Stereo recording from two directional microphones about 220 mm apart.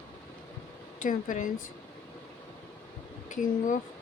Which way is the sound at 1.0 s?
35° left (ahead or behind).